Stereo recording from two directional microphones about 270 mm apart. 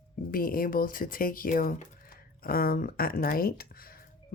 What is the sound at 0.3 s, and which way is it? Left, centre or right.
Speech, left.